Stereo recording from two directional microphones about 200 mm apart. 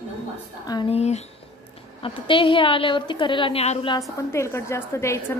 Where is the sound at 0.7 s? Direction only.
25° left (ahead or behind).